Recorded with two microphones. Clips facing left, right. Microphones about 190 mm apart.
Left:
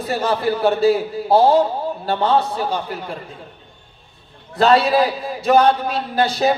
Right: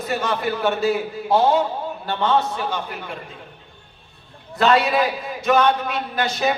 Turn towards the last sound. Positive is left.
turn(degrees=35)  # may be behind; listen again after turning